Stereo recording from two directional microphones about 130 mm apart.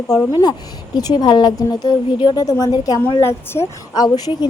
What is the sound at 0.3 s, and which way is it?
A woman's voice, 30° left (ahead or behind).